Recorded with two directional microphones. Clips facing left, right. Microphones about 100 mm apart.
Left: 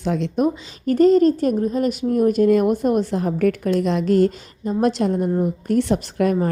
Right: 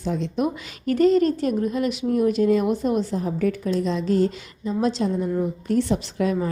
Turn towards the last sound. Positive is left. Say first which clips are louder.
# left 4 dB
turn(degrees=55)  # may be behind; listen again after turning